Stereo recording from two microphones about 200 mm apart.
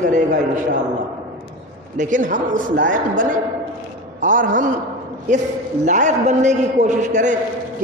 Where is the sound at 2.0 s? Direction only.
40° right (ahead or behind).